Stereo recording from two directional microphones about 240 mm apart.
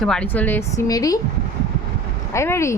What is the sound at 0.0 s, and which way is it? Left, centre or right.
A woman's voice, centre.